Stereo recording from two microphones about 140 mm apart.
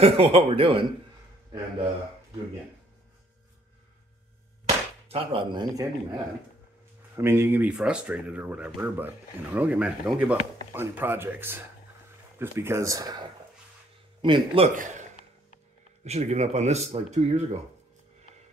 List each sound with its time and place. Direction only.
0.0 s speech: 45° right (ahead or behind)
5.0 s speech: 40° right (ahead or behind)
7.2 s speech: 15° right (ahead or behind)
14.2 s speech: 40° right (ahead or behind)
16.0 s speech: 50° right (ahead or behind)